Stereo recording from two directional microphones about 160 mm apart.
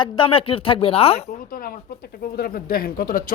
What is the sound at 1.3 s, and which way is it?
Speech, 65° left (ahead or behind).